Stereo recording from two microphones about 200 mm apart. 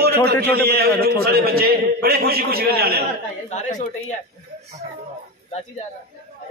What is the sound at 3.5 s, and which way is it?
Speech, 40° left (ahead or behind).